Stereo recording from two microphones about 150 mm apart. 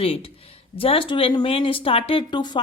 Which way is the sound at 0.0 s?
40° left (ahead or behind).